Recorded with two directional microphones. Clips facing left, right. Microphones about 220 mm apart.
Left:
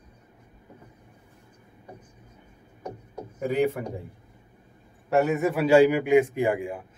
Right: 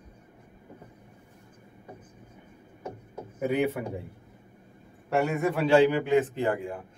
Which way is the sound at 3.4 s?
5° right (ahead or behind).